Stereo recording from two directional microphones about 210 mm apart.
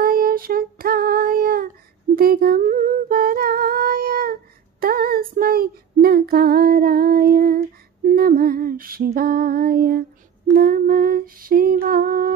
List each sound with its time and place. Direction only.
0.0 s child singing: 45° right (ahead or behind)
2.1 s humming: 45° right (ahead or behind)
10.6 s lullaby: 45° right (ahead or behind)